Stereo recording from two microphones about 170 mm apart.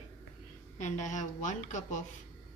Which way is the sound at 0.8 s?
45° left (ahead or behind).